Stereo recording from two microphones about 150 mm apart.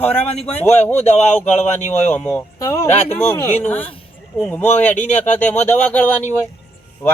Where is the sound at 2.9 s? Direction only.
45° left (ahead or behind).